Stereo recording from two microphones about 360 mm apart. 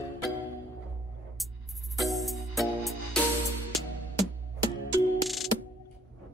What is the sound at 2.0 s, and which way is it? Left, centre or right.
Music, centre.